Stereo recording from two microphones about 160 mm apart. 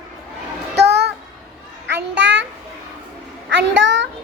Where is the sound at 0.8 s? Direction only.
90° right.